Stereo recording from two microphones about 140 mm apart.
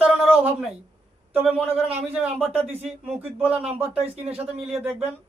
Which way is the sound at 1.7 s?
45° right (ahead or behind).